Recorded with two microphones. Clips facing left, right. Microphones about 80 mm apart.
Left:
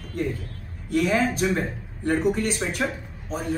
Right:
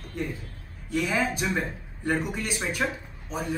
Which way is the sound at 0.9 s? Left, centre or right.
Centre.